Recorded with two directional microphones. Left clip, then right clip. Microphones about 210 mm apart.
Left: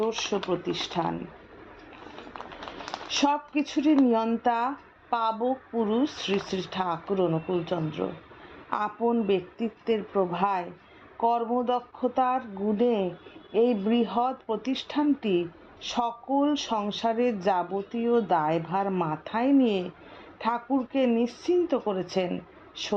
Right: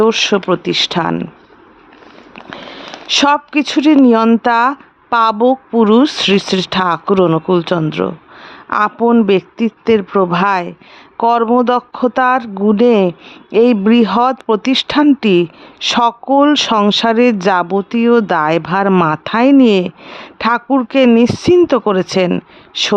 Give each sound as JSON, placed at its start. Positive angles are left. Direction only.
{"t": 0.0, "sound": "speech", "side_deg": -45}
{"t": 2.9, "sound": "speech", "side_deg": -45}